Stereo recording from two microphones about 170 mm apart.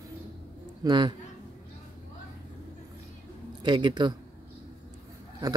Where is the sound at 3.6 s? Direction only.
25° right (ahead or behind).